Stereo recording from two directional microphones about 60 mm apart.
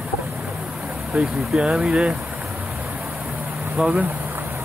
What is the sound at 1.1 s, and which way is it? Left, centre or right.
Speech, centre.